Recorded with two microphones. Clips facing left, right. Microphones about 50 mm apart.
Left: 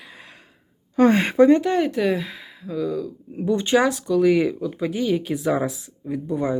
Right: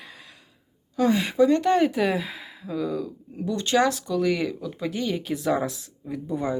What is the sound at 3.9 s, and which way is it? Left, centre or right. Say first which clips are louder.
Speech: left 6 dB; centre.